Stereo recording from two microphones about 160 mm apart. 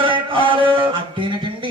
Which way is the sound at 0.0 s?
30° right (ahead or behind).